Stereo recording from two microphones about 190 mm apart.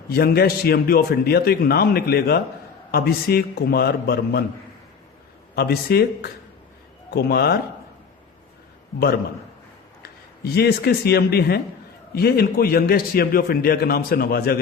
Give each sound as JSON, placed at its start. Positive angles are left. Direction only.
{"t": 0.1, "sound": "a man's voice", "side_deg": 55}
{"t": 5.5, "sound": "a man's voice", "side_deg": 55}
{"t": 10.0, "sound": "a man's voice", "side_deg": 55}